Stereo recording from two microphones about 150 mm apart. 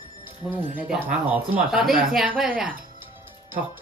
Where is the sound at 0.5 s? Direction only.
10° right (ahead or behind).